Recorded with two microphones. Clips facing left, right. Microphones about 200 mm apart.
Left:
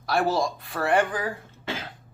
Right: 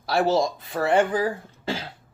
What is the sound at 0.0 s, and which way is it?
Speech, 25° right (ahead or behind).